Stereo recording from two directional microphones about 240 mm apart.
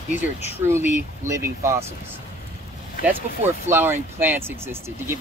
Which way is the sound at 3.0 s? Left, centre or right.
Left.